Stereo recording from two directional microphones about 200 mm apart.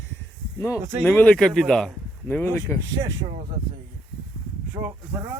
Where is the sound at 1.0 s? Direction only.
10° left (ahead or behind).